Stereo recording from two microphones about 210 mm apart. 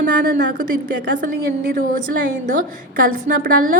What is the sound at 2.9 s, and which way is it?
Speech, 40° right (ahead or behind).